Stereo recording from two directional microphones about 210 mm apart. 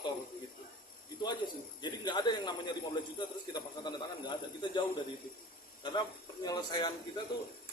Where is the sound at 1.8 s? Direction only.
20° left (ahead or behind).